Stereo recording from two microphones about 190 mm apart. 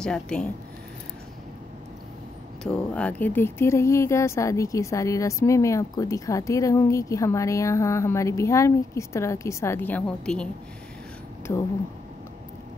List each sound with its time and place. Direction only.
0.0 s speech: 5° left (ahead or behind)
2.6 s speech: 5° left (ahead or behind)
11.5 s speech: 15° left (ahead or behind)